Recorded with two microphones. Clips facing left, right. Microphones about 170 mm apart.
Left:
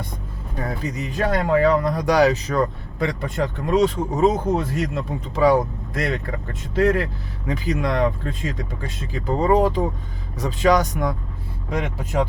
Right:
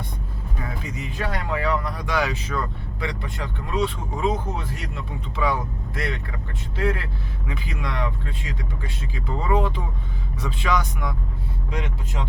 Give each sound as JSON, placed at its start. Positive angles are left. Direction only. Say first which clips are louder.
{"t": 0.6, "sound": "speech", "louder": "left 6 dB", "side_deg": 40}